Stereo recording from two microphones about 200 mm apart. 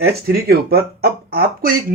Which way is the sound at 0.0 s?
50° right (ahead or behind).